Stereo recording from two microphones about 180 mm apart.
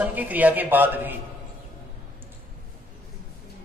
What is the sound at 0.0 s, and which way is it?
A man's voice, 10° right (ahead or behind).